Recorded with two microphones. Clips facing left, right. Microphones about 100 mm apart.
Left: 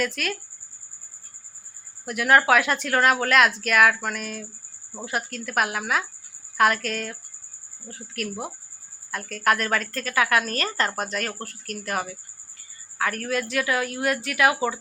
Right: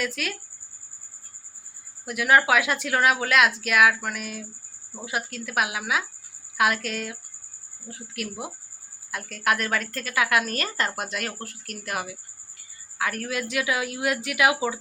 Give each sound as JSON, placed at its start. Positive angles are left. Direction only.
{"t": 2.0, "sound": "a woman's voice", "side_deg": -5}